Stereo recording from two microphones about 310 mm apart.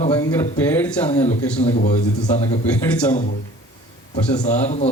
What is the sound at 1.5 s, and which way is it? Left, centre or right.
Speech, left.